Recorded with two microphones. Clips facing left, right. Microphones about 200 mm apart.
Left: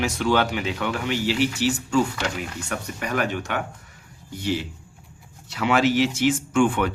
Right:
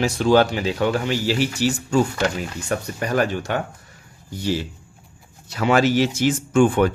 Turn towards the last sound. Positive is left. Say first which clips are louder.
# right 4 dB
turn(degrees=-40)  # may be behind; listen again after turning